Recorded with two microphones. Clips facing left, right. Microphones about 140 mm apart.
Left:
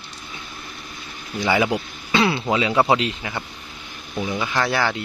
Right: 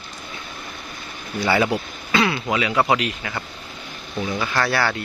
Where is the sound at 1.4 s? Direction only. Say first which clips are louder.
Even; 20° left (ahead or behind).